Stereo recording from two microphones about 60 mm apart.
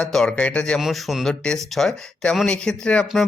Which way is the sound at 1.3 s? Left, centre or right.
Centre.